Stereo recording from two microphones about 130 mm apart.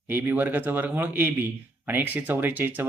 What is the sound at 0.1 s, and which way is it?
Speech, 15° right (ahead or behind).